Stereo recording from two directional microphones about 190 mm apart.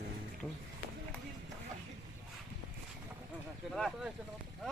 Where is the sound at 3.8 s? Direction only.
Centre (ahead or behind).